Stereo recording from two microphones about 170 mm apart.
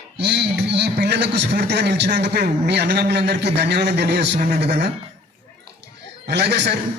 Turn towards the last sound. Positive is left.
turn(degrees=-80)